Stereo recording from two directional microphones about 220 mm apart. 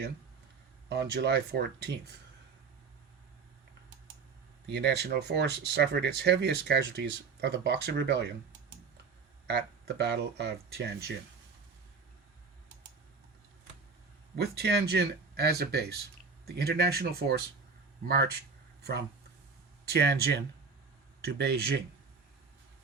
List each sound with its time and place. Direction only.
0.9 s speech: 50° right (ahead or behind)
4.7 s speech: 50° right (ahead or behind)
9.5 s speech: 50° right (ahead or behind)
14.3 s speech: 45° right (ahead or behind)
18.8 s speech: 50° right (ahead or behind)